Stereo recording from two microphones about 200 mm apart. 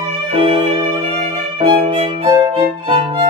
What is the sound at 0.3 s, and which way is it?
Violin, 30° right (ahead or behind).